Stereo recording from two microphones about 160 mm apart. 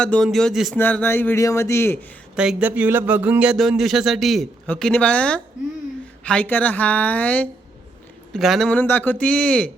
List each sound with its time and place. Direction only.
0.0 s speech: 5° left (ahead or behind)
0.8 s a man's voice: 10° left (ahead or behind)
2.3 s a man's voice: 5° right (ahead or behind)